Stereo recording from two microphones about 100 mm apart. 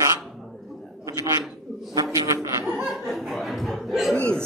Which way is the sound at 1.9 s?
35° right (ahead or behind).